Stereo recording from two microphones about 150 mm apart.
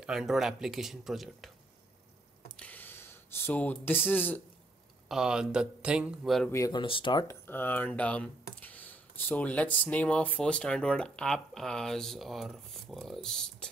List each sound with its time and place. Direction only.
0.0 s speech: centre (ahead or behind)
2.5 s a sound: 10° left (ahead or behind)
5.0 s speech: 5° right (ahead or behind)
6.5 s speech: 25° left (ahead or behind)
7.2 s speech: 15° left (ahead or behind)